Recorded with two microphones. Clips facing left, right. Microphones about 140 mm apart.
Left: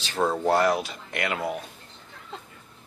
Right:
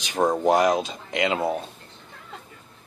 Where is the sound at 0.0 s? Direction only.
15° right (ahead or behind).